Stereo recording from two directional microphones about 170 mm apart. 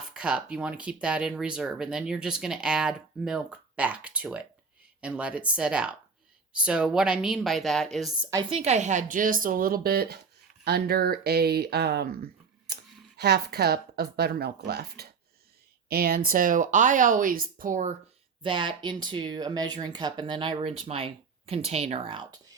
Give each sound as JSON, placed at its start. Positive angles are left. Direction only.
{"t": 0.1, "sound": "speech", "side_deg": -5}
{"t": 8.4, "sound": "a woman's voice", "side_deg": -40}
{"t": 18.4, "sound": "speech", "side_deg": -30}